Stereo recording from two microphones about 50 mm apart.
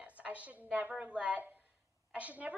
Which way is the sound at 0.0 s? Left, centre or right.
Right.